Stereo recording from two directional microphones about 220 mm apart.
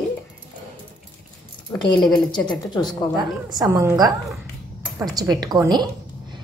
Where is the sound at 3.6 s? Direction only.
15° right (ahead or behind).